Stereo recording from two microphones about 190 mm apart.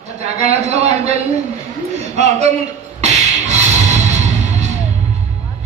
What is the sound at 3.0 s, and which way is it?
Music, 35° right (ahead or behind).